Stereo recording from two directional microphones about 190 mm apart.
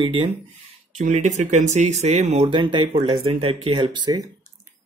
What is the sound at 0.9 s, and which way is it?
Speech, 40° right (ahead or behind).